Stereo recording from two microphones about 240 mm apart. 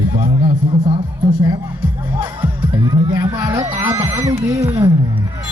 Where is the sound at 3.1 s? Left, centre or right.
Centre.